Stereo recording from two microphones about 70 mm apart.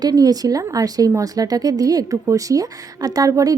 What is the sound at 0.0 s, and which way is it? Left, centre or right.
A woman's voice, right.